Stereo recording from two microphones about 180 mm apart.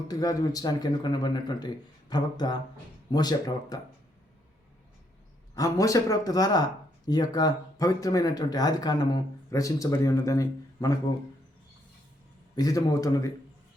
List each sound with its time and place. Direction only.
0.1 s speech: 20° left (ahead or behind)
5.5 s speech: 20° left (ahead or behind)
12.5 s speech: 20° left (ahead or behind)